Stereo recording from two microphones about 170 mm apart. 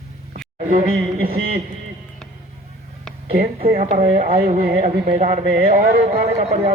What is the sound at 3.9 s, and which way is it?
Speech, 50° right (ahead or behind).